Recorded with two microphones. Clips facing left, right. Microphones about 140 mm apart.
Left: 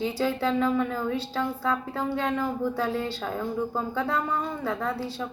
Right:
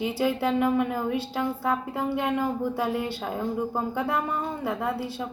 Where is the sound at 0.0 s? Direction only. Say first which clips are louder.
Right 1 dB; 15° right (ahead or behind).